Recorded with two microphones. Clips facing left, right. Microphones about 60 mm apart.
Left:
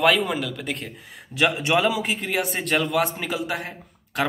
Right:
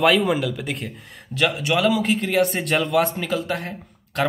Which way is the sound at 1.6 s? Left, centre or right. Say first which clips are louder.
Even; left.